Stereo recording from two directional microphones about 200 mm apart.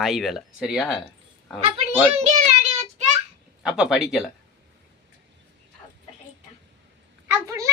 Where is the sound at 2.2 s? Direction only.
35° right (ahead or behind).